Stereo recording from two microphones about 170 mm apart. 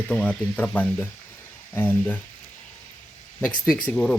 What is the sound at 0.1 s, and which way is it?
Speech, 5° left (ahead or behind).